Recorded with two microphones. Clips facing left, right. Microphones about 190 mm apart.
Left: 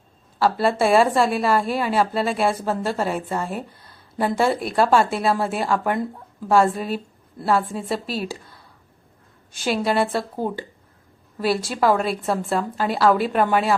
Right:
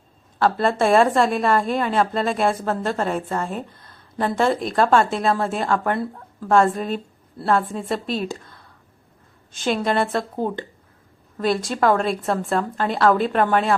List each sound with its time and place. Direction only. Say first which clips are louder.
0.3 s a woman's voice: even; 5° left (ahead or behind)